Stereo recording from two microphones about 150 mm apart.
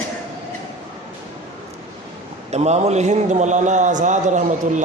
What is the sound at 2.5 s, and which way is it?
A man's voice, 45° right (ahead or behind).